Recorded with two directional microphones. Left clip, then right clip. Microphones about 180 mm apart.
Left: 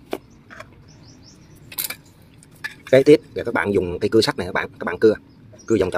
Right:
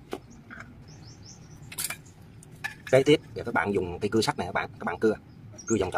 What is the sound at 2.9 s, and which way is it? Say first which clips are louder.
Speech: left 8 dB; 30° left (ahead or behind).